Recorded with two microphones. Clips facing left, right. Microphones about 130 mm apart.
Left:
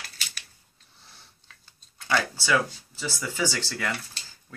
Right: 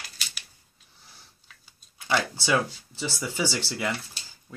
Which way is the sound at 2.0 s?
20° right (ahead or behind).